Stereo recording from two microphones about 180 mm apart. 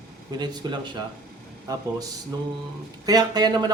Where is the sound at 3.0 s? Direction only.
20° right (ahead or behind).